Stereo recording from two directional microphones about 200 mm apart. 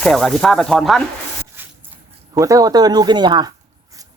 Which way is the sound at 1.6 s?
10° right (ahead or behind).